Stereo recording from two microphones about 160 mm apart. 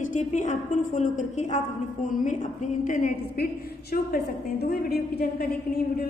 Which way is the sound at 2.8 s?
55° left (ahead or behind).